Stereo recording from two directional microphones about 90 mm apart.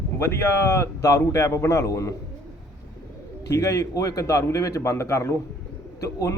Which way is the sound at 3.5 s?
35° left (ahead or behind).